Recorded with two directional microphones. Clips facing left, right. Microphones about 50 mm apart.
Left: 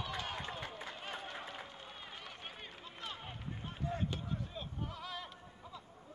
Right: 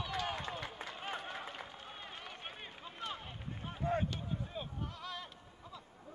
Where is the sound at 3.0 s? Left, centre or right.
Centre.